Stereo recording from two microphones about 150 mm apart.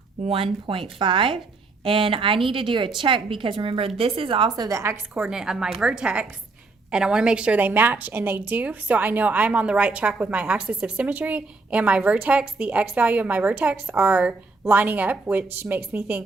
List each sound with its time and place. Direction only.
0.3 s a woman's voice: 40° right (ahead or behind); by 4.9 s 20° right (ahead or behind)
5.1 s a woman's voice: 5° right (ahead or behind)